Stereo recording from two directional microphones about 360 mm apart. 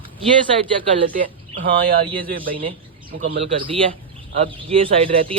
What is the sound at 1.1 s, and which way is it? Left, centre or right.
A man's voice, right.